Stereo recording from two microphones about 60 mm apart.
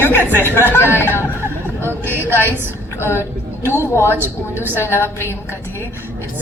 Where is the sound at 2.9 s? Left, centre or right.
Left.